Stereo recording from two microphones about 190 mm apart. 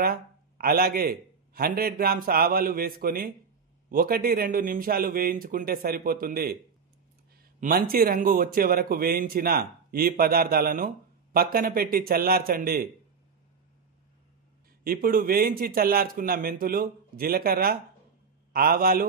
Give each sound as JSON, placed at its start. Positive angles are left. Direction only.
{"t": 0.0, "sound": "speech", "side_deg": -50}
{"t": 7.6, "sound": "speech", "side_deg": -50}
{"t": 14.8, "sound": "speech", "side_deg": -50}